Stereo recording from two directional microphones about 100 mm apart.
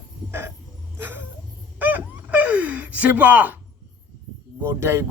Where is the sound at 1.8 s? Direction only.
15° right (ahead or behind).